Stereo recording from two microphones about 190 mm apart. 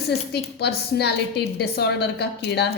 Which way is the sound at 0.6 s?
60° left (ahead or behind).